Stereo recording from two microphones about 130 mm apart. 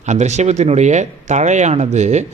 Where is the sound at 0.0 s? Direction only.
65° right (ahead or behind).